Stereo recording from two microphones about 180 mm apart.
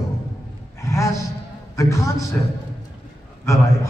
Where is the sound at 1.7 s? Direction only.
15° left (ahead or behind).